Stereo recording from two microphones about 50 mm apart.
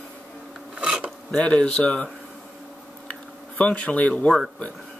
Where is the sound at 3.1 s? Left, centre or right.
Left.